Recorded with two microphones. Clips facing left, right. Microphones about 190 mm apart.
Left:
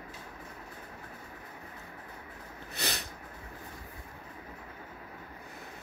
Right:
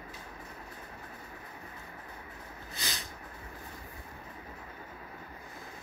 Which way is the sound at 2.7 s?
65° left (ahead or behind).